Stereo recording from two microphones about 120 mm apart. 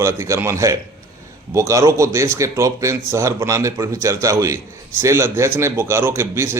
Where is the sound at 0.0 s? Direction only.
25° right (ahead or behind).